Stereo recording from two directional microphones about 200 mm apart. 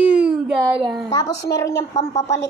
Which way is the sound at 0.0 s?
5° right (ahead or behind).